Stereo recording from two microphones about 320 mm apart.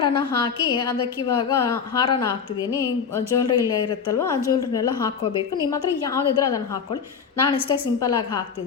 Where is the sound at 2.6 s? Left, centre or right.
Centre.